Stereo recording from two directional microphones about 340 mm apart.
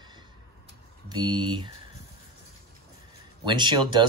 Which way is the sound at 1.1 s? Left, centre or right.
Centre.